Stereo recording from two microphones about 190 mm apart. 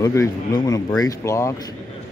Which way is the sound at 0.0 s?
15° left (ahead or behind).